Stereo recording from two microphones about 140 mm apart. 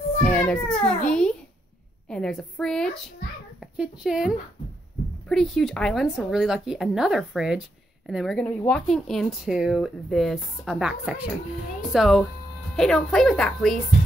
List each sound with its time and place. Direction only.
0.2 s a sound: 10° left (ahead or behind)
2.0 s speech: 5° left (ahead or behind)
5.3 s speech: centre (ahead or behind)